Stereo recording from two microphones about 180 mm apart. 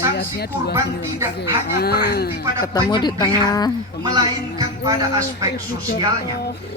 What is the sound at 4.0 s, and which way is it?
A man's voice, 20° right (ahead or behind).